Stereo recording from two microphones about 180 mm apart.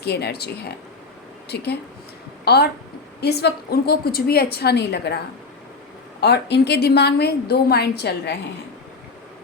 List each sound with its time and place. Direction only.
0.0 s a woman's voice: 65° left (ahead or behind)